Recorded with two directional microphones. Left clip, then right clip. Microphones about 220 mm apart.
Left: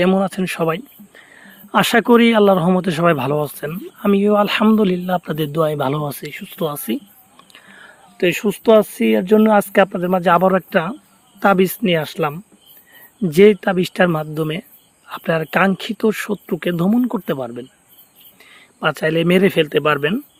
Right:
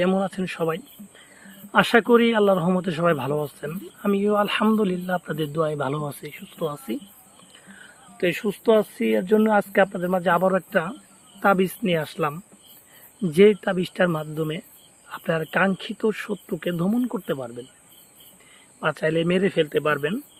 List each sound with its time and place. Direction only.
0.0 s speech: 45° left (ahead or behind)